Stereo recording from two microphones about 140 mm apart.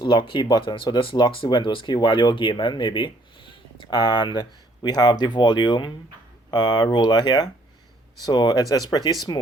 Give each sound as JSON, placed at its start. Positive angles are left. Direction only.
{"t": 0.0, "sound": "speech", "side_deg": 35}